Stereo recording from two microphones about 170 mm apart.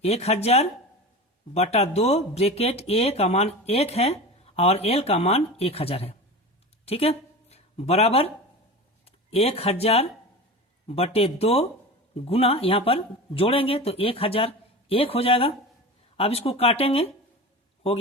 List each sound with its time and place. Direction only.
0.0 s speech: 40° left (ahead or behind)